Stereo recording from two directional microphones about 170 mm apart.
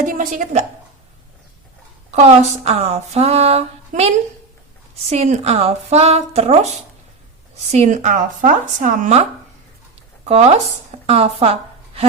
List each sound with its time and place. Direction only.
0.0 s speech: 50° right (ahead or behind)
2.0 s speech: 40° right (ahead or behind)
7.7 s speech: 40° right (ahead or behind)
10.2 s speech: 40° right (ahead or behind)